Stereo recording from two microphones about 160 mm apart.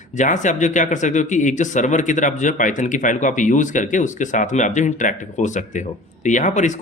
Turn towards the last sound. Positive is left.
turn(degrees=50)  # may be behind; listen again after turning